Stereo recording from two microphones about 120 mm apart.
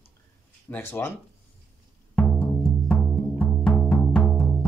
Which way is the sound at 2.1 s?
10° left (ahead or behind).